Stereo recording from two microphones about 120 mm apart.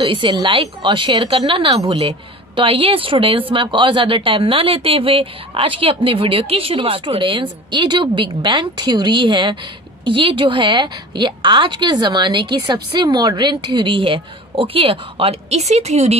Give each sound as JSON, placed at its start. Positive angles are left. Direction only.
{"t": 0.0, "sound": "a woman's voice", "side_deg": -45}